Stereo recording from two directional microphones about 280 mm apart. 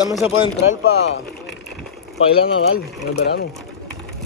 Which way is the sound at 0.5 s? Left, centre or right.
Left.